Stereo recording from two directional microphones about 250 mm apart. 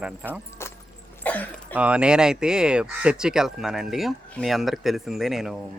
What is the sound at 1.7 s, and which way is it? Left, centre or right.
Speech, centre.